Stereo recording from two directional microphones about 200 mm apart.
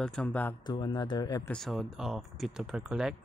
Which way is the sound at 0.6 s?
20° left (ahead or behind).